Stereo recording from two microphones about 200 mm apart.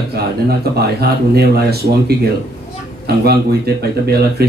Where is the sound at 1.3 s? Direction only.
50° right (ahead or behind).